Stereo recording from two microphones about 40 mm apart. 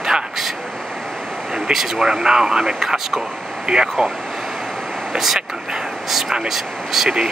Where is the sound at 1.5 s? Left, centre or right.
Centre.